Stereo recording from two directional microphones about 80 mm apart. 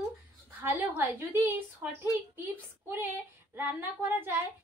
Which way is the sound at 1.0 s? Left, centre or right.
Right.